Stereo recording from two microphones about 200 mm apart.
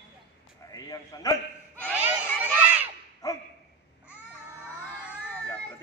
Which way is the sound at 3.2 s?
15° left (ahead or behind).